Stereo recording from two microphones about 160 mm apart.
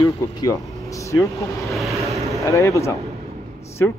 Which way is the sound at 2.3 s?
20° left (ahead or behind).